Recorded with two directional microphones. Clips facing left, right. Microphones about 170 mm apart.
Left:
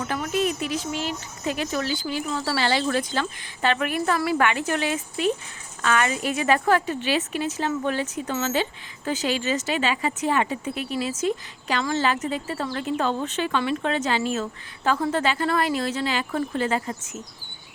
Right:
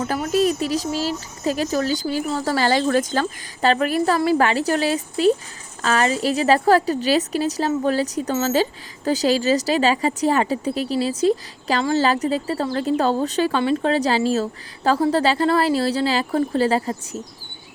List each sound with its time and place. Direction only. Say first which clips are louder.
0.0 s speech: right 5 dB; 35° right (ahead or behind)